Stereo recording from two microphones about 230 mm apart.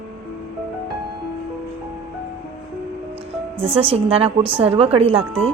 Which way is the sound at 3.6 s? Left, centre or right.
Right.